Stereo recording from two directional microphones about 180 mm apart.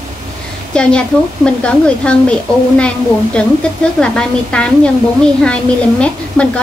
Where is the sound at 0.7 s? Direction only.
5° left (ahead or behind).